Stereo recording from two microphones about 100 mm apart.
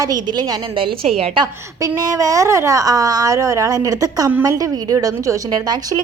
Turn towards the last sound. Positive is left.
turn(degrees=-40)  # may be behind; listen again after turning